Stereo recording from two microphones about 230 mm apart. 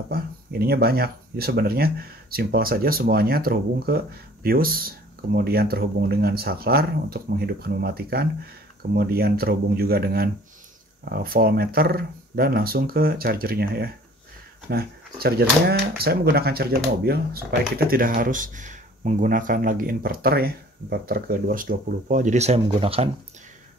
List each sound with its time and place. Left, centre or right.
0.1 s speech: right